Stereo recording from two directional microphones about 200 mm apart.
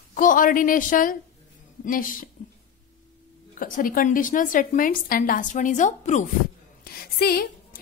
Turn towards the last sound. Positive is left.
turn(degrees=50)  # may be behind; listen again after turning